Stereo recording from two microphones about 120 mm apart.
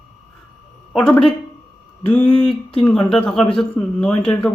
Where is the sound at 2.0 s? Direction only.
10° left (ahead or behind).